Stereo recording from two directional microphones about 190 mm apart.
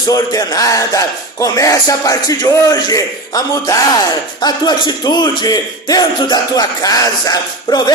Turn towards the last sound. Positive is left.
turn(degrees=20)  # may be behind; listen again after turning